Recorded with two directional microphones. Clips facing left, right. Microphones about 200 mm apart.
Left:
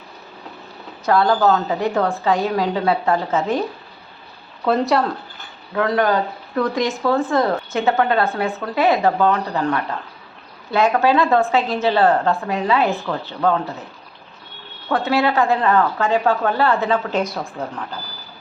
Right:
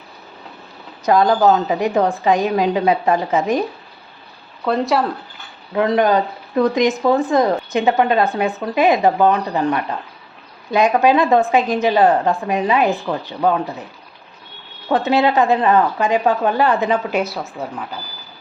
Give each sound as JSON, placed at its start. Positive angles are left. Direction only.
{"t": 1.0, "sound": "a woman's voice", "side_deg": -15}
{"t": 4.6, "sound": "speech", "side_deg": 0}
{"t": 5.7, "sound": "a woman's voice", "side_deg": -20}
{"t": 14.8, "sound": "a woman's voice", "side_deg": -20}